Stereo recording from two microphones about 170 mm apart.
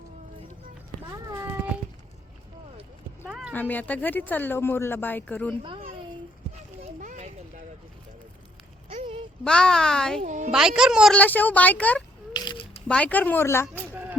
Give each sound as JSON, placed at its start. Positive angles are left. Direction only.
{"t": 1.1, "sound": "a sound", "side_deg": -15}
{"t": 3.2, "sound": "horse", "side_deg": -5}
{"t": 3.5, "sound": "speech", "side_deg": 10}
{"t": 6.8, "sound": "children playing", "side_deg": -45}
{"t": 8.9, "sound": "a sound", "side_deg": -35}
{"t": 9.4, "sound": "speech", "side_deg": 5}
{"t": 10.2, "sound": "a sound", "side_deg": -45}
{"t": 10.5, "sound": "speech", "side_deg": -5}
{"t": 11.2, "sound": "speech", "side_deg": 10}
{"t": 12.3, "sound": "ratchet", "side_deg": 25}
{"t": 12.9, "sound": "speech", "side_deg": 10}
{"t": 13.9, "sound": "music", "side_deg": -10}